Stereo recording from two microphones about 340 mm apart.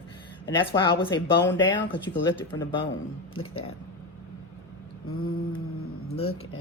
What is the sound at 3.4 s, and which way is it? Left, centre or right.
Speech, left.